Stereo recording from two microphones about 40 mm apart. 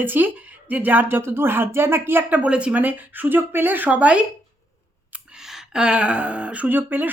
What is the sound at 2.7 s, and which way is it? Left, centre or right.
Speech, right.